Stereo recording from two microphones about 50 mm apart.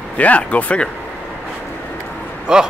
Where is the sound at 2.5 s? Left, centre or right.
Centre.